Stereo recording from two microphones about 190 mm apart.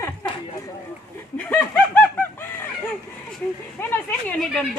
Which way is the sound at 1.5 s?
10° left (ahead or behind).